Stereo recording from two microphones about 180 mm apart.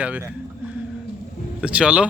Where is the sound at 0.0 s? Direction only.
10° right (ahead or behind).